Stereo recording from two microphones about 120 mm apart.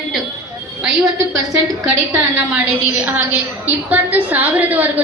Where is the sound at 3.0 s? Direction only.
10° right (ahead or behind).